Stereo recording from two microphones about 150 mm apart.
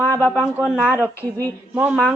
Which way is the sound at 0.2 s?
10° right (ahead or behind).